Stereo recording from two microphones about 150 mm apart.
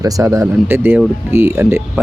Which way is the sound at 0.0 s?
20° right (ahead or behind).